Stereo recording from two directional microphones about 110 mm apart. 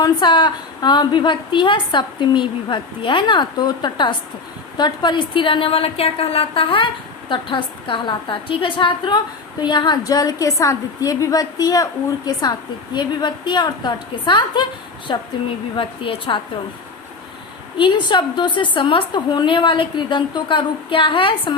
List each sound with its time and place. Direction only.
0.0 s a woman's voice: 45° left (ahead or behind)
17.7 s a woman's voice: 45° left (ahead or behind)